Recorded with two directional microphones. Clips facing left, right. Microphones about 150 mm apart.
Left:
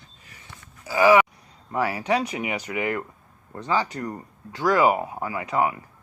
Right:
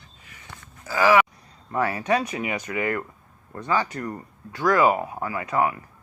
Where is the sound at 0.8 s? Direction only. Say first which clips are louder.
Left 2 dB; 15° left (ahead or behind).